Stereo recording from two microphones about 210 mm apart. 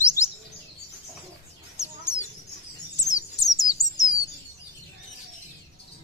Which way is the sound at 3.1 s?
15° left (ahead or behind).